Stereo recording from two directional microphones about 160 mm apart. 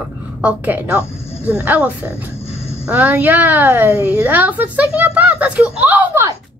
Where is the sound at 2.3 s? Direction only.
40° left (ahead or behind).